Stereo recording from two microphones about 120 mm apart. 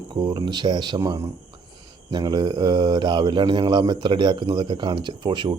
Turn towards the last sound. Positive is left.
turn(degrees=-40)  # may be behind; listen again after turning